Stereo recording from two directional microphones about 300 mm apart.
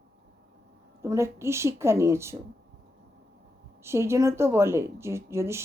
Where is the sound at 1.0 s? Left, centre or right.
Centre.